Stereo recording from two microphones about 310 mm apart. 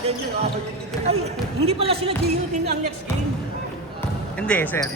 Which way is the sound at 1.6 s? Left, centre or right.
Centre.